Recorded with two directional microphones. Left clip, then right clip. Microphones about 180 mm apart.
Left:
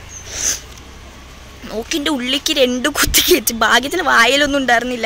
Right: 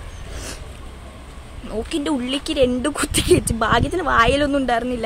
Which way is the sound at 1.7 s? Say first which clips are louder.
Left 4 dB; 5° right (ahead or behind).